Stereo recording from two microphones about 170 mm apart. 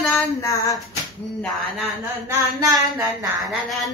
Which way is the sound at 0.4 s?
20° left (ahead or behind).